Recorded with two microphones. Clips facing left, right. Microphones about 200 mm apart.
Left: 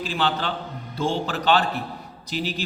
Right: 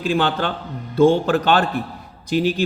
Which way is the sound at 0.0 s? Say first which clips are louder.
Right 5 dB; 50° right (ahead or behind).